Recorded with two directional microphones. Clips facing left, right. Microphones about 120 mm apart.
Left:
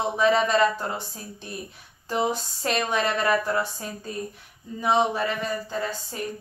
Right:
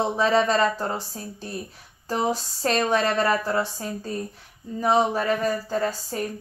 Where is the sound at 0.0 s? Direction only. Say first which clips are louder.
Right 1 dB; 35° right (ahead or behind).